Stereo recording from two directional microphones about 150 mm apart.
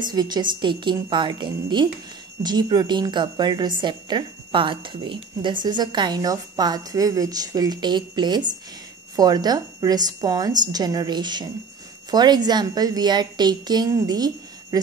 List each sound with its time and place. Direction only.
0.0 s a woman's voice: 30° right (ahead or behind)